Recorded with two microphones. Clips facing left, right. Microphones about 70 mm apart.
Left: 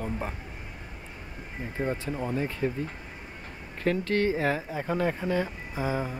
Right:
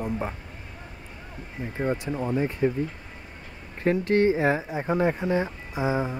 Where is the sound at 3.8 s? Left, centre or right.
Right.